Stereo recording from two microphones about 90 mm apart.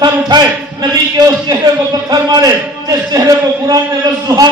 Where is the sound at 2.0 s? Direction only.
50° right (ahead or behind).